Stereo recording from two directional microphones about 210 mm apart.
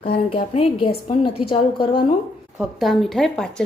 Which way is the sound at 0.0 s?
25° left (ahead or behind).